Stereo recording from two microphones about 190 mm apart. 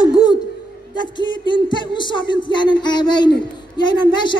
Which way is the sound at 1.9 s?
25° left (ahead or behind).